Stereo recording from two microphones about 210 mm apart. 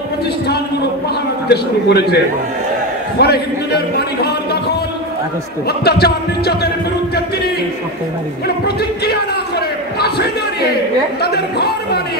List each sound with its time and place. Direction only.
1.5 s a man's voice: 50° left (ahead or behind)
3.2 s a man's voice: 50° left (ahead or behind)
8.6 s a man's voice: 50° left (ahead or behind)
11.2 s a man's voice: 50° left (ahead or behind)